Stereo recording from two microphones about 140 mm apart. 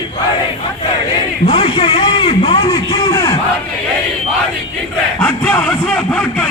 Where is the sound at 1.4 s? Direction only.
45° left (ahead or behind); by 3.4 s 25° left (ahead or behind).